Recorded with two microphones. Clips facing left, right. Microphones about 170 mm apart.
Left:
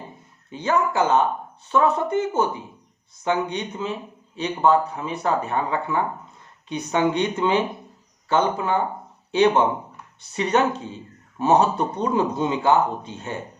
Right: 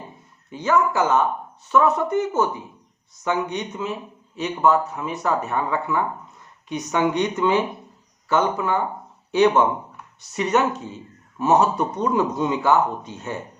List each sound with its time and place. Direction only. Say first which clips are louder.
0.5 s a man's voice: right 1 dB; 25° left (ahead or behind)